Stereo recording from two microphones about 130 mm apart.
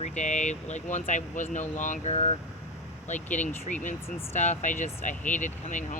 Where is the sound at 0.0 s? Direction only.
65° left (ahead or behind).